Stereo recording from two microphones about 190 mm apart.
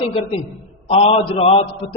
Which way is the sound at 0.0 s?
30° left (ahead or behind).